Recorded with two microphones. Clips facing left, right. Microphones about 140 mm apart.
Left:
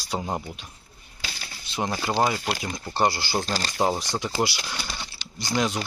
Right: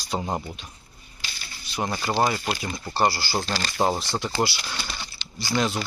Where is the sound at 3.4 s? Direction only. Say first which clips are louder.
Even; 40° left (ahead or behind).